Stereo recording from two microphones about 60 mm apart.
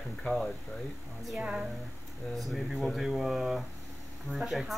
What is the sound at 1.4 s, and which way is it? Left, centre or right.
Speech, centre.